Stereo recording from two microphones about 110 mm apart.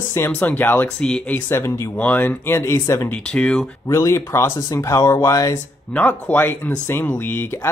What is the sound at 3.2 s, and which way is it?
Speech, 10° left (ahead or behind).